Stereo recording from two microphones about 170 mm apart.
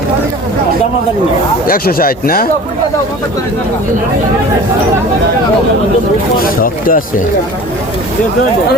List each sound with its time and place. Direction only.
1.6 s speech: 60° left (ahead or behind)
6.4 s speech: 55° left (ahead or behind)